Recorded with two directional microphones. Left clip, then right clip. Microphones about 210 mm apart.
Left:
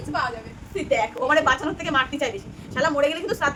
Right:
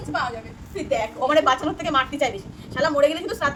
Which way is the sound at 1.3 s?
Centre (ahead or behind).